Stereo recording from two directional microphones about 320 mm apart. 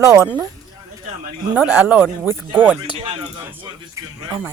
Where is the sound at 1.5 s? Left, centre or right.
Centre.